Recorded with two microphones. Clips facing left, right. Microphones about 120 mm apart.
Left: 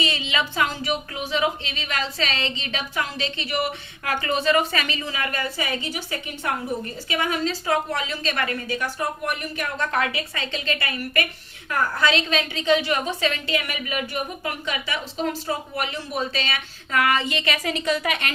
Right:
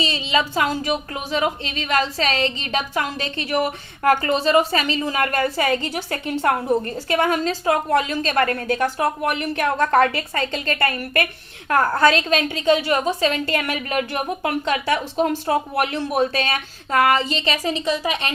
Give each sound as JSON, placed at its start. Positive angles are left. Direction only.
{"t": 0.0, "sound": "speech", "side_deg": -35}
{"t": 9.7, "sound": "speech", "side_deg": -45}
{"t": 13.5, "sound": "speech", "side_deg": -50}